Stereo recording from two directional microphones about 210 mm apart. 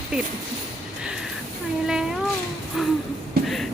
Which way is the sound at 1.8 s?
Centre (ahead or behind).